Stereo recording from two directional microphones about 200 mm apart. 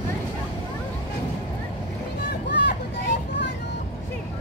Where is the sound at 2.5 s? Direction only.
60° left (ahead or behind).